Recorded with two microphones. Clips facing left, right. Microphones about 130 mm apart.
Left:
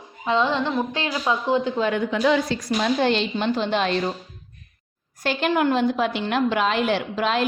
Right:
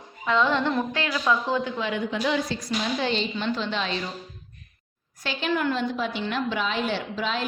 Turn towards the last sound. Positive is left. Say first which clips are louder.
# left 5 dB
turn(degrees=65)  # may be behind; listen again after turning